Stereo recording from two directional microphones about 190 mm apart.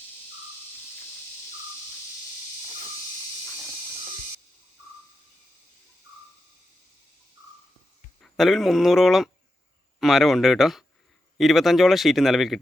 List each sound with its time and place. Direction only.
8.2 s speech: centre (ahead or behind)